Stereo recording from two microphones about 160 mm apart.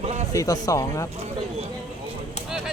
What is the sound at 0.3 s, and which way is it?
Speech, 20° left (ahead or behind).